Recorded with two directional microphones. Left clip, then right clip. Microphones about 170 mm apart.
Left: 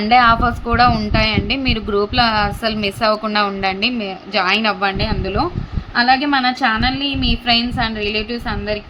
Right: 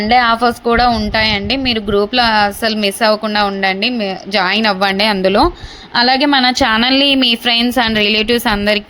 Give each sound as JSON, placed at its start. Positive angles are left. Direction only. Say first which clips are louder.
{"t": 0.1, "sound": "a woman's voice", "louder": "right 1 dB", "side_deg": -25}